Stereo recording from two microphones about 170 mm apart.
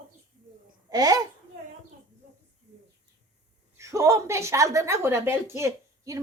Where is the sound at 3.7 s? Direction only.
20° right (ahead or behind).